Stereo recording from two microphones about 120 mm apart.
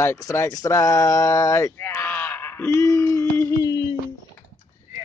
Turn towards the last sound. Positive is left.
turn(degrees=30)  # may be behind; listen again after turning